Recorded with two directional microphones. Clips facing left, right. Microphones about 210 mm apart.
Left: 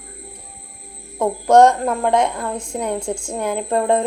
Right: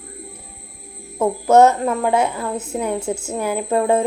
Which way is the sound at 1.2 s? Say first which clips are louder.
Even; 5° right (ahead or behind).